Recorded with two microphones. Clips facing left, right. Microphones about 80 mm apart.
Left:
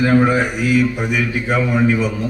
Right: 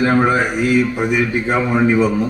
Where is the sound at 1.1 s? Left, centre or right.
Right.